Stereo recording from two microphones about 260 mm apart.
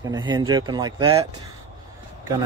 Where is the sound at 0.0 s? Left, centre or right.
Centre.